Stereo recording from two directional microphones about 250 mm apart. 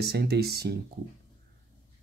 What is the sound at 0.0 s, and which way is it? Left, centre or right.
Speech, right.